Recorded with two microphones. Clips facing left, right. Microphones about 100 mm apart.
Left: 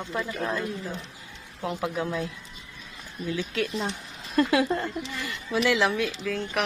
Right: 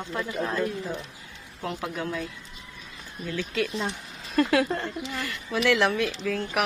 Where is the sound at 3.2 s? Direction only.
15° left (ahead or behind).